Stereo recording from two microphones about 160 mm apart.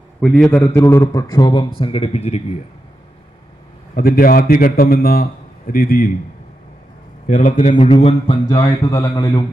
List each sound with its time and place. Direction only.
0.2 s a man's voice: 5° left (ahead or behind); by 2.6 s 40° left (ahead or behind)
3.9 s a man's voice: 65° left (ahead or behind)
7.3 s a man's voice: 55° left (ahead or behind)
7.5 s a man's voice: 35° left (ahead or behind)